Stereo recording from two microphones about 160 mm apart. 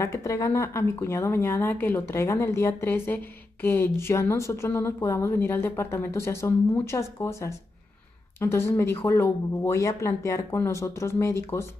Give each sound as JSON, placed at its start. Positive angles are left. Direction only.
{"t": 0.0, "sound": "a woman's voice", "side_deg": 15}